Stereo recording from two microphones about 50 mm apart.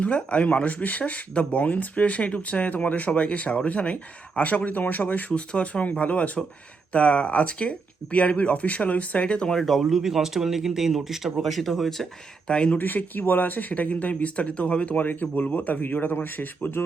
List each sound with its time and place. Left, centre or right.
0.0 s speech: left
5.5 s speech: left
9.5 s speech: centre
9.8 s speech: centre
12.5 s speech: centre
12.7 s speech: left
15.0 s speech: left